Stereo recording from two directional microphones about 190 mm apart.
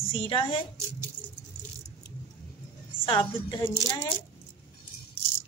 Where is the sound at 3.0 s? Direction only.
25° left (ahead or behind).